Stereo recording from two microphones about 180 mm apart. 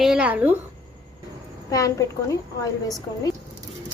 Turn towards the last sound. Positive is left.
turn(degrees=20)  # may be behind; listen again after turning